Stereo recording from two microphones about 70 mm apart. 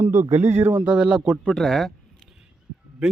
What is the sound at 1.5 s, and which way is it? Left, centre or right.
Speech, centre.